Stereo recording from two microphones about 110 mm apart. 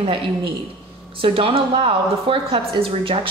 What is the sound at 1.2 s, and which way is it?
A woman's voice, 55° right (ahead or behind).